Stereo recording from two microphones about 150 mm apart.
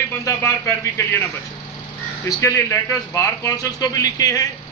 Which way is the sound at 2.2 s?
20° left (ahead or behind).